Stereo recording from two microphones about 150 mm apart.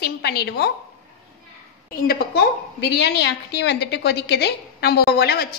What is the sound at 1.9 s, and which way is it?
A woman's voice, 85° left.